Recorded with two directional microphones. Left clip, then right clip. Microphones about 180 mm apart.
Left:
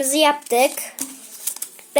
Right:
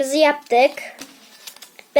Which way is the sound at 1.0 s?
40° left (ahead or behind).